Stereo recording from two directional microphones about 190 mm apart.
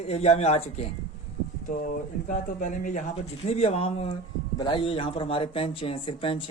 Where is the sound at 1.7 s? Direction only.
45° left (ahead or behind).